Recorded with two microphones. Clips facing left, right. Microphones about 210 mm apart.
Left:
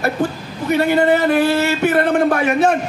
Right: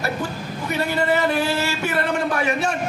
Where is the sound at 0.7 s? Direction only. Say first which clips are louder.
Left 7 dB; 55° left (ahead or behind).